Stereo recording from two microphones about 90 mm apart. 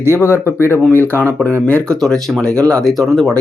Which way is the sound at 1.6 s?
10° left (ahead or behind).